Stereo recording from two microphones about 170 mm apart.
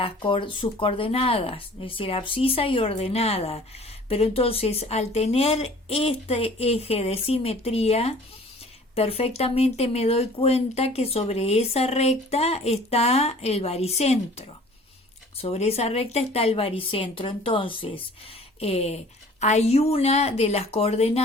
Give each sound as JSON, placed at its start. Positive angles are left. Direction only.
{"t": 0.0, "sound": "speech", "side_deg": 30}